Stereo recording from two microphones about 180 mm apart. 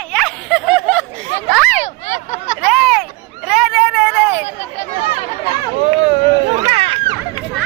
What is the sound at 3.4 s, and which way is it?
Vehicle, 5° right (ahead or behind).